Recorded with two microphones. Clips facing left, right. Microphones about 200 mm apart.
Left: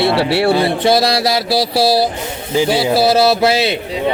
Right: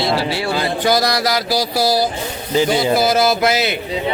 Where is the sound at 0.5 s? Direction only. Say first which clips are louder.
Left 4 dB; 30° left (ahead or behind).